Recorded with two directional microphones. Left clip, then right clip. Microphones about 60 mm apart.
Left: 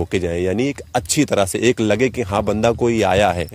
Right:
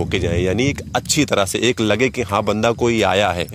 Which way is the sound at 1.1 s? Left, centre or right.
Left.